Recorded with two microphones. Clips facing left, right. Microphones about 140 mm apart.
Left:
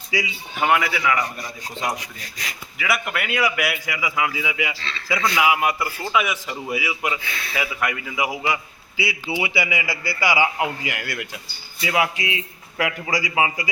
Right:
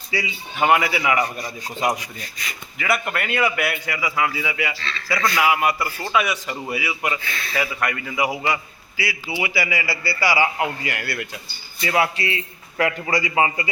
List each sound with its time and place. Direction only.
0.1 s a man's voice: 10° left (ahead or behind)
0.6 s a man's voice: 5° right (ahead or behind)
2.7 s a man's voice: 5° left (ahead or behind)
9.3 s a man's voice: 20° left (ahead or behind)